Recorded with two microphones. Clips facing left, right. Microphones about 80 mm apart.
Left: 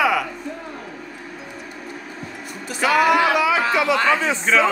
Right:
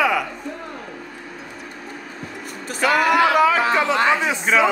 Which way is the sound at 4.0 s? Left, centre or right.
Centre.